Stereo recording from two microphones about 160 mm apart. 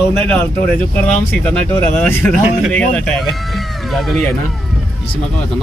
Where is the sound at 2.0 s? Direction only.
10° left (ahead or behind).